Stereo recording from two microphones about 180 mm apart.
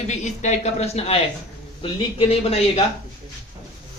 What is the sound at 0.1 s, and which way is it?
A man's voice, 40° left (ahead or behind).